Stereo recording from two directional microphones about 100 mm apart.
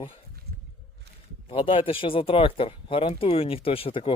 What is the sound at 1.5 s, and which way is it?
Speech, 65° left (ahead or behind).